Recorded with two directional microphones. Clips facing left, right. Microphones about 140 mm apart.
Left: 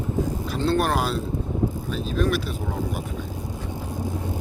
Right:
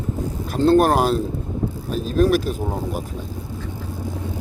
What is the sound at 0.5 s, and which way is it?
Speech, 45° right (ahead or behind).